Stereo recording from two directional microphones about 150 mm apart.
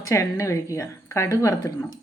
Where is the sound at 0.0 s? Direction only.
20° left (ahead or behind).